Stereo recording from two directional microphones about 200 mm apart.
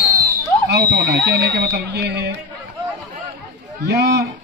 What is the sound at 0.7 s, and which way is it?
Speech, 55° right (ahead or behind).